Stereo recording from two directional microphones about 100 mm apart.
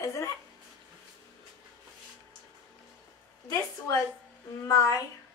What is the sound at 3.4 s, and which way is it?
A woman's voice, 35° left (ahead or behind).